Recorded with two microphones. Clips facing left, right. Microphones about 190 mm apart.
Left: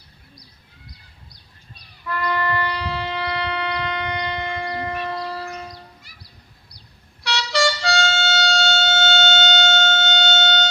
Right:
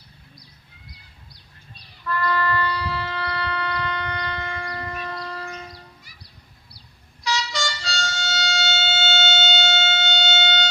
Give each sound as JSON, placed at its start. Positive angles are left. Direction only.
{"t": 2.0, "sound": "shofar", "side_deg": 15}
{"t": 7.3, "sound": "music", "side_deg": 65}